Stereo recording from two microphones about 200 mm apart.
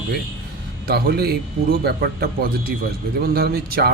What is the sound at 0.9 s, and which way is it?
Speech, 50° right (ahead or behind).